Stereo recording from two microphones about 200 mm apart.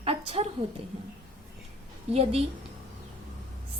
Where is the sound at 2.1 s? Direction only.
30° right (ahead or behind).